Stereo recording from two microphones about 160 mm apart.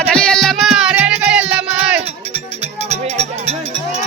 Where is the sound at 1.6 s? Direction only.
40° right (ahead or behind).